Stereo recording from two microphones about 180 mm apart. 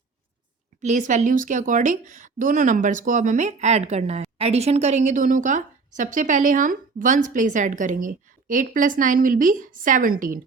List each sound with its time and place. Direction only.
0.8 s speech: 45° right (ahead or behind)